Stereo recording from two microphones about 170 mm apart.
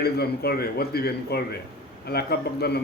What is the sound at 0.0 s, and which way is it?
A man's voice, 70° left (ahead or behind).